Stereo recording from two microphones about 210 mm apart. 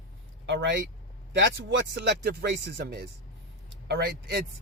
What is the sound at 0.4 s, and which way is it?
Speech, 60° right (ahead or behind).